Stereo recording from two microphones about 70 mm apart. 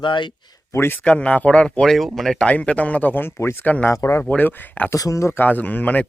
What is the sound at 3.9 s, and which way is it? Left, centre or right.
Speech, left.